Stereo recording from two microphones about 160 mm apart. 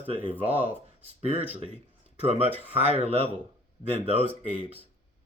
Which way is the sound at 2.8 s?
40° right (ahead or behind).